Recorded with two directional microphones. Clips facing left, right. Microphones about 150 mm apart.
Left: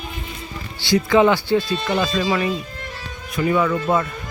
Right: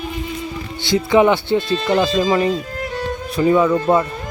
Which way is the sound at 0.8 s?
20° right (ahead or behind).